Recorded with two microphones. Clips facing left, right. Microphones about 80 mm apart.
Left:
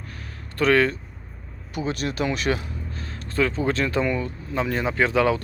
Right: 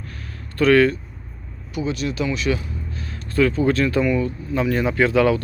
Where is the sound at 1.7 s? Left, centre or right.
Left.